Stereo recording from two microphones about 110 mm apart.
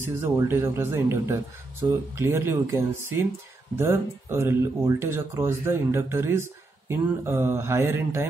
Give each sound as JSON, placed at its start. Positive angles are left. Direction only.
{"t": 0.0, "sound": "speech", "side_deg": -25}